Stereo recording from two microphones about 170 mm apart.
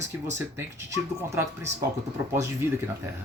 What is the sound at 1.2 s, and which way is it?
Speech, 15° right (ahead or behind).